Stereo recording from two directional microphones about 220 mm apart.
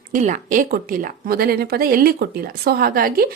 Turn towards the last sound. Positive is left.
turn(degrees=-40)  # may be behind; listen again after turning